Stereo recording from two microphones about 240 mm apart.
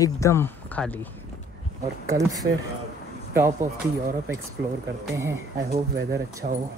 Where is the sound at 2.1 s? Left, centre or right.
Centre.